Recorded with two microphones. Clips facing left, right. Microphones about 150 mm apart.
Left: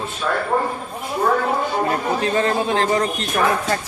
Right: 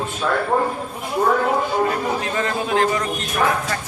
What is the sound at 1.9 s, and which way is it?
Speech, 35° left (ahead or behind).